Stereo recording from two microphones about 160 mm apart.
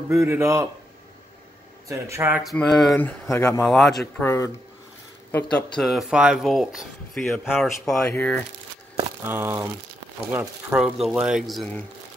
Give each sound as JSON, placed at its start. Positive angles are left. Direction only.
{"t": 0.1, "sound": "speech", "side_deg": -15}
{"t": 1.9, "sound": "speech", "side_deg": -20}
{"t": 2.4, "sound": "speech", "side_deg": 5}
{"t": 3.0, "sound": "speech", "side_deg": 15}
{"t": 3.6, "sound": "speech", "side_deg": 5}
{"t": 5.8, "sound": "speech", "side_deg": 0}
{"t": 9.2, "sound": "speech", "side_deg": -15}